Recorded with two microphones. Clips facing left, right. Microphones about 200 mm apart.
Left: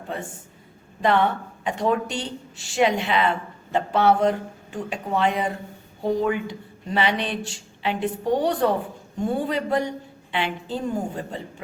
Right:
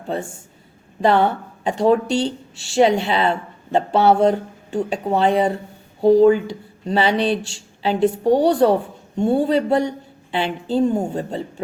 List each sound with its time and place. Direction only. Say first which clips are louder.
1.0 s speech: right 4 dB; 30° right (ahead or behind)